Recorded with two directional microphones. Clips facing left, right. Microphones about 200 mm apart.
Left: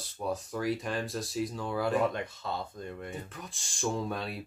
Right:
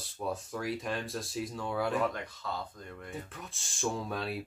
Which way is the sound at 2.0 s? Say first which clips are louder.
Left 3 dB; 25° left (ahead or behind).